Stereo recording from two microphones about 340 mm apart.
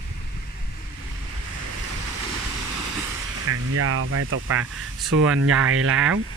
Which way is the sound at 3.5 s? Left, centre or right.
Right.